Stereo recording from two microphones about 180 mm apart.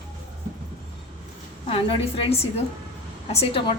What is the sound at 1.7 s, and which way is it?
A woman's voice, 30° left (ahead or behind).